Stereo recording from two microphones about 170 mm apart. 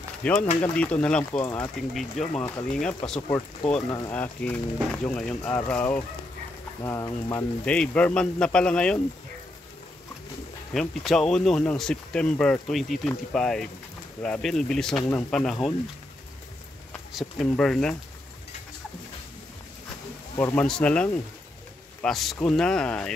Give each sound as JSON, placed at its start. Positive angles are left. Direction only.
{"t": 0.2, "sound": "speech", "side_deg": 5}
{"t": 1.8, "sound": "speech", "side_deg": 0}
{"t": 3.2, "sound": "speech", "side_deg": 20}
{"t": 6.8, "sound": "speech", "side_deg": 20}
{"t": 7.6, "sound": "speech", "side_deg": 5}
{"t": 10.7, "sound": "speech", "side_deg": 0}
{"t": 17.1, "sound": "speech", "side_deg": 0}
{"t": 20.3, "sound": "speech", "side_deg": 10}